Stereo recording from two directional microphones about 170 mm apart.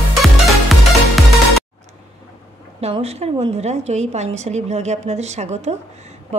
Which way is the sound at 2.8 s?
35° right (ahead or behind).